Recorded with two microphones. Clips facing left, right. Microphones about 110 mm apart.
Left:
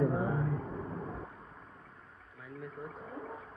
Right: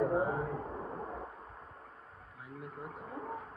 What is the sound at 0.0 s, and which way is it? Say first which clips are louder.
Vehicle: even; 30° right (ahead or behind).